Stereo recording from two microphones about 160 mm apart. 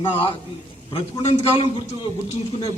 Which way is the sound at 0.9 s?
35° left (ahead or behind).